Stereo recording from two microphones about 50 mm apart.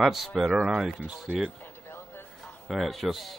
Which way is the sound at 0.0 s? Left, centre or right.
Centre.